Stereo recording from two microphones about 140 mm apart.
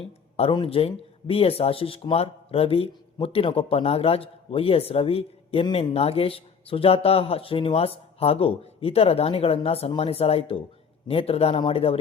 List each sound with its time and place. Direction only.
0.5 s speech: 40° left (ahead or behind)